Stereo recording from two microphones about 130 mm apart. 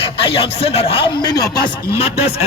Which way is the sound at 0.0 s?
45° left (ahead or behind).